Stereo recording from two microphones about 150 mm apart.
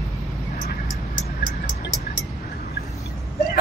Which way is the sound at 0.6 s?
60° left (ahead or behind).